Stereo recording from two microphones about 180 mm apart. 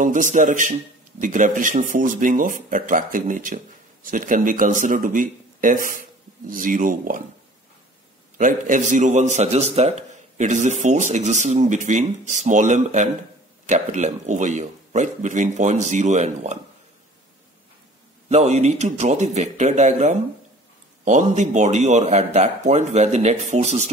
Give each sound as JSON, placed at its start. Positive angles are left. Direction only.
{"t": 0.0, "sound": "speech", "side_deg": -45}
{"t": 8.4, "sound": "a man's voice", "side_deg": -45}
{"t": 18.3, "sound": "a man's voice", "side_deg": -40}